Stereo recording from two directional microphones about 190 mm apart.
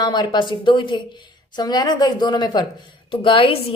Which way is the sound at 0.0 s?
20° left (ahead or behind).